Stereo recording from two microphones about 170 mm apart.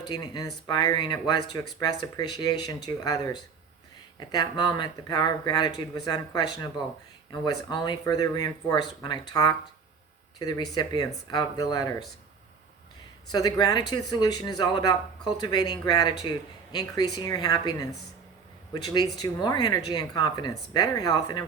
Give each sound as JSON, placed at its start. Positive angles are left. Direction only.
{"t": 0.1, "sound": "speech", "side_deg": 25}
{"t": 13.3, "sound": "speech", "side_deg": 20}